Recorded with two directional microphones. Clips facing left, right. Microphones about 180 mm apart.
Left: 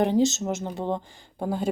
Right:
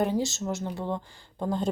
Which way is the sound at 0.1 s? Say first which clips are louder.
Left 6 dB; 20° left (ahead or behind).